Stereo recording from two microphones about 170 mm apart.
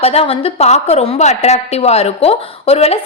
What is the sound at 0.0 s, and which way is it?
A woman's voice, 35° left (ahead or behind).